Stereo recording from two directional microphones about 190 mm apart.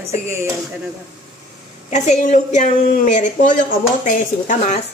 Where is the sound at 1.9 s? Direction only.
40° left (ahead or behind).